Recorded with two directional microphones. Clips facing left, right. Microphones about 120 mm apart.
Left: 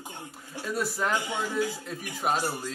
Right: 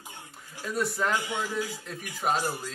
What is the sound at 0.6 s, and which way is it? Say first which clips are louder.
Speech: right 1 dB; centre (ahead or behind).